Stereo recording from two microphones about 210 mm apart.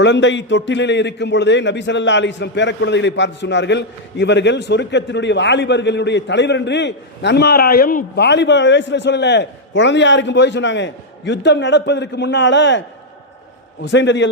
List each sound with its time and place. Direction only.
0.0 s a man's voice: 55° left (ahead or behind)
13.8 s a man's voice: 60° left (ahead or behind)